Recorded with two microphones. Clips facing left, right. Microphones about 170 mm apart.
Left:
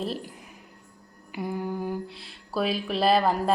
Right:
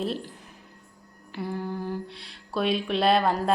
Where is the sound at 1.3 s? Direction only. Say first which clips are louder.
Left 1 dB; 10° left (ahead or behind).